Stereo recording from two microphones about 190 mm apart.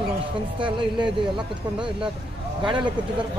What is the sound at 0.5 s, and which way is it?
Speech, 25° right (ahead or behind).